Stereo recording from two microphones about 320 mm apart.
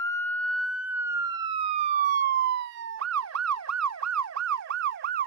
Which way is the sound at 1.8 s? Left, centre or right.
Right.